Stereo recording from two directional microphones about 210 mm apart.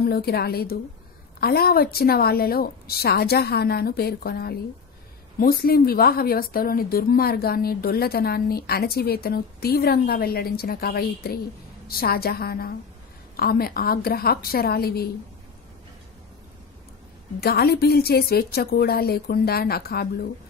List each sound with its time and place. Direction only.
0.1 s speech: 50° left (ahead or behind)
17.4 s speech: 45° left (ahead or behind)